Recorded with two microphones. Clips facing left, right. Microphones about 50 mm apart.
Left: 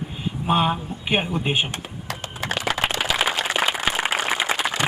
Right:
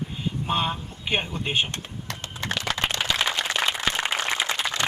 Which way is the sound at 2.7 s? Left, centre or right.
Centre.